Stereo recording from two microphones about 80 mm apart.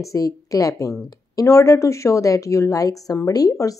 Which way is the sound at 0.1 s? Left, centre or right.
Left.